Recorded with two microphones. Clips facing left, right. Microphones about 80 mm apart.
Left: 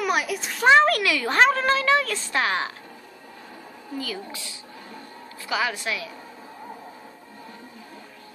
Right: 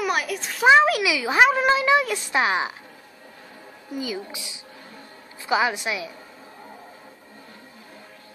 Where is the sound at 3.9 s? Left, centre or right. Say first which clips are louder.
Right 2 dB; centre.